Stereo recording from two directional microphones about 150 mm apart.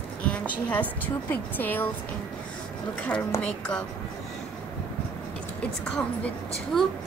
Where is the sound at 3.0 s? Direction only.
10° left (ahead or behind).